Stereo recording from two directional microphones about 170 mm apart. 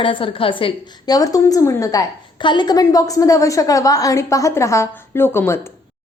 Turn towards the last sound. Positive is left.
turn(degrees=15)  # may be behind; listen again after turning